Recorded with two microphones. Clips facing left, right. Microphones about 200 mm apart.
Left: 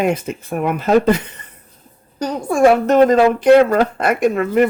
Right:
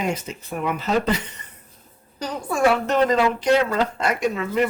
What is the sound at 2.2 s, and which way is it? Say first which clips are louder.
Speech: left 7 dB; 45° left (ahead or behind).